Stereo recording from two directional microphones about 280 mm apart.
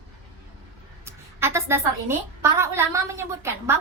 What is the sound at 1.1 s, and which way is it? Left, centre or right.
A woman's voice, centre.